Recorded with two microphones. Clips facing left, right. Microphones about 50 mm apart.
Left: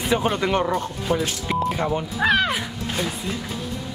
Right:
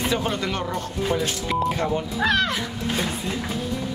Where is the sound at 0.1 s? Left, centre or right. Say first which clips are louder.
Left 4 dB; centre.